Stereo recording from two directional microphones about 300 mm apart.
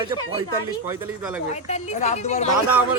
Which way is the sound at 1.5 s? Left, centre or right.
Left.